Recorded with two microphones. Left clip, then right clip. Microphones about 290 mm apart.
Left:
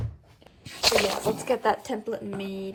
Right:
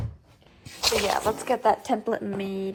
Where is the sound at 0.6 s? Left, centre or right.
Centre.